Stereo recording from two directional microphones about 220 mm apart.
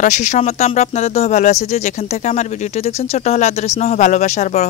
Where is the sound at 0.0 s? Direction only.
35° left (ahead or behind).